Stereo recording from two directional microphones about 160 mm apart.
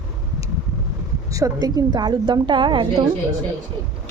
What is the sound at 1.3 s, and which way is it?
A woman's voice, 20° right (ahead or behind).